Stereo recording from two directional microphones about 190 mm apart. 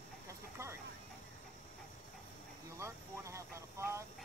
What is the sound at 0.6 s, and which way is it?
Vehicle, 15° right (ahead or behind).